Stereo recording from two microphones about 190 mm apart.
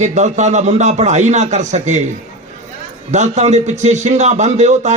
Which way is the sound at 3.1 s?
35° right (ahead or behind).